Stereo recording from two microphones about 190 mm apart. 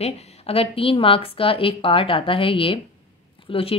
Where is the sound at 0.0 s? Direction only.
30° left (ahead or behind).